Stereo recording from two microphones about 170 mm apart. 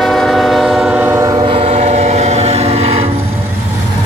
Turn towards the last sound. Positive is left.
turn(degrees=-40)  # may be behind; listen again after turning